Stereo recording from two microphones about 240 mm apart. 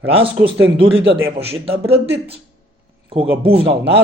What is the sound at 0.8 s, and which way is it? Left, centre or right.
Speech, right.